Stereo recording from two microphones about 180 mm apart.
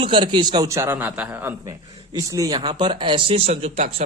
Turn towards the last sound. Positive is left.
turn(degrees=-35)  # may be behind; listen again after turning